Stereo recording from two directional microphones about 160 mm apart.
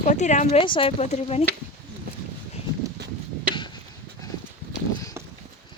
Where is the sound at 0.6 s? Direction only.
35° left (ahead or behind).